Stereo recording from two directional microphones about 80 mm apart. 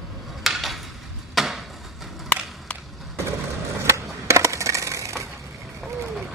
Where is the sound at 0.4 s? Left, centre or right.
Centre.